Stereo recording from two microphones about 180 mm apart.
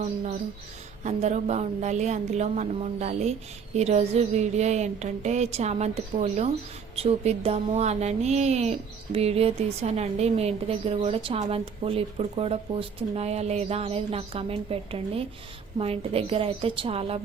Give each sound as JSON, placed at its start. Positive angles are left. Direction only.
{"t": 1.0, "sound": "speech", "side_deg": -40}